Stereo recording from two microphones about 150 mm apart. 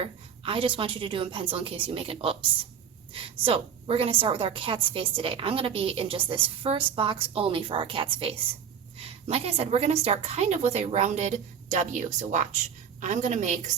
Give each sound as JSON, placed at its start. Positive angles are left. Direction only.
{"t": 0.0, "sound": "a woman's voice", "side_deg": -35}